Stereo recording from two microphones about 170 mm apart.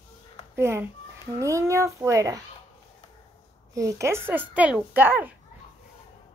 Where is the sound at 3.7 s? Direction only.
20° right (ahead or behind).